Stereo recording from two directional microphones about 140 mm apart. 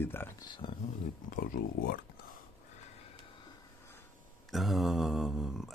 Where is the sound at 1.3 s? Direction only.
75° left (ahead or behind).